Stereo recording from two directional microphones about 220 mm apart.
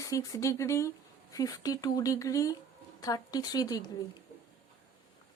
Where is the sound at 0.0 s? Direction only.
15° left (ahead or behind).